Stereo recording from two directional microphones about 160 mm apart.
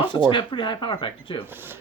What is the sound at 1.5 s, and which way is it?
Speech, 15° right (ahead or behind).